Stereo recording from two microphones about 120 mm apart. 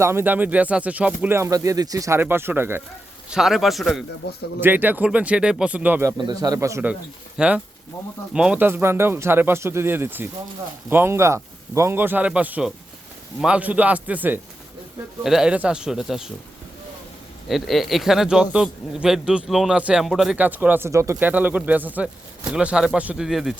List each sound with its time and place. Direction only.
0.0 s speech: 20° right (ahead or behind)
3.2 s speech: 5° right (ahead or behind)
4.6 s speech: 15° right (ahead or behind)
6.1 s speech: 35° right (ahead or behind)
7.3 s speech: 10° right (ahead or behind)
8.6 s speech: 20° right (ahead or behind)
15.2 s speech: 5° right (ahead or behind)
17.5 s speech: centre (ahead or behind)
20.3 s speech: 15° right (ahead or behind)
21.2 s speech: 15° right (ahead or behind)